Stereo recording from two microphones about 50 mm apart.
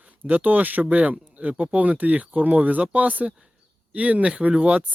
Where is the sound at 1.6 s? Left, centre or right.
Right.